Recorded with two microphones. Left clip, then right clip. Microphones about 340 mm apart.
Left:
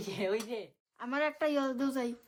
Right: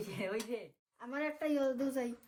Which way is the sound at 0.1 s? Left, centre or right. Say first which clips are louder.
Left 7 dB; centre.